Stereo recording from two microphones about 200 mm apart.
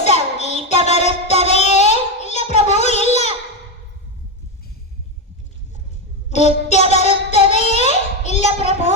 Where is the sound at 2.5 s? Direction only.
35° left (ahead or behind).